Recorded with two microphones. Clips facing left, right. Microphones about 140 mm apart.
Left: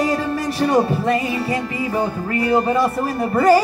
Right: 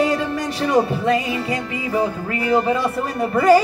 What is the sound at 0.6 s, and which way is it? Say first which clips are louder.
Music: even; 30° left (ahead or behind).